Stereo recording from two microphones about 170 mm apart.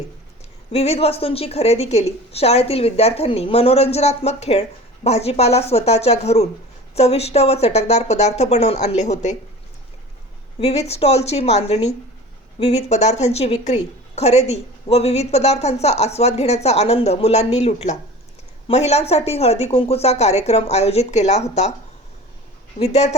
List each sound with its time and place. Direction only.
0.7 s a woman's voice: 35° left (ahead or behind)
10.6 s a woman's voice: 40° left (ahead or behind)
22.8 s a woman's voice: 40° left (ahead or behind)